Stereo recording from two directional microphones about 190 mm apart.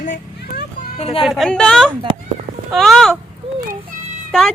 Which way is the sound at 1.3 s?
Centre (ahead or behind).